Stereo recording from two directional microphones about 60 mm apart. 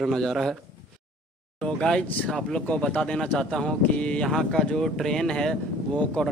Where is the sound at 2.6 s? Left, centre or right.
Left.